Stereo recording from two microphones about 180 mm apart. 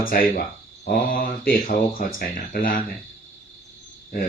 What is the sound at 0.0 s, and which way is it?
Speech, 50° left (ahead or behind).